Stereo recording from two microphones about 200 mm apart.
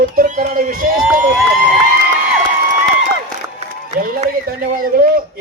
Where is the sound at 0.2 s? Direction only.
45° right (ahead or behind).